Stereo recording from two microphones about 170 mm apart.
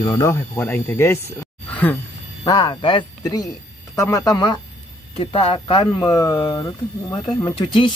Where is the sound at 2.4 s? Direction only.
25° left (ahead or behind).